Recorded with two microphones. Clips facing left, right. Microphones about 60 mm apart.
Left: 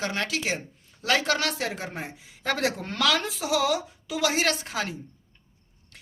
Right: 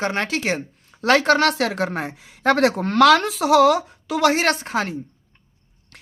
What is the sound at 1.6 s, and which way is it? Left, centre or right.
A woman's voice, right.